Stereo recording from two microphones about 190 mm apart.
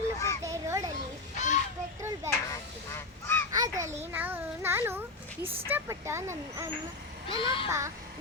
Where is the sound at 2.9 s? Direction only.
10° left (ahead or behind).